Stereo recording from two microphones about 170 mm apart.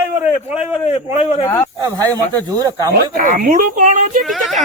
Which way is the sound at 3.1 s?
55° right (ahead or behind).